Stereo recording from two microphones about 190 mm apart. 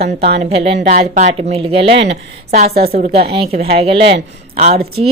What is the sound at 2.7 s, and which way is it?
Speech, 55° right (ahead or behind).